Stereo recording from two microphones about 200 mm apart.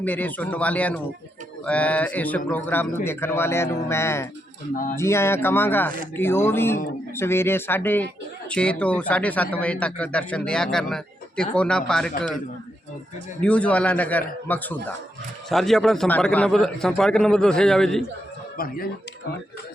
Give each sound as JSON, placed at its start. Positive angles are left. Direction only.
{"t": 0.0, "sound": "speech", "side_deg": 10}
{"t": 4.7, "sound": "speech", "side_deg": 40}
{"t": 4.9, "sound": "a man's voice", "side_deg": 15}
{"t": 13.4, "sound": "a man's voice", "side_deg": 5}
{"t": 18.5, "sound": "speech", "side_deg": 45}